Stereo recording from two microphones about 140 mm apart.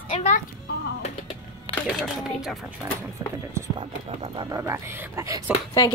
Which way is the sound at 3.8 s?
40° right (ahead or behind).